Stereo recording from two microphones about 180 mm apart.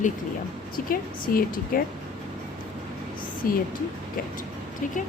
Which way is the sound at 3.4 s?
50° left (ahead or behind).